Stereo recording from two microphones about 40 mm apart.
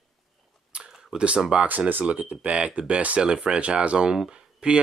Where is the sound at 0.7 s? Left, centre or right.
Right.